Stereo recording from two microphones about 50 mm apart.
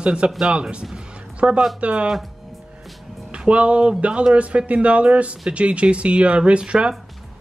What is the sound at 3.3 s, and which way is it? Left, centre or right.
Speech, right.